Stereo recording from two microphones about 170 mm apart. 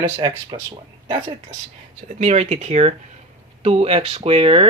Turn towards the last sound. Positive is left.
turn(degrees=-35)  # may be behind; listen again after turning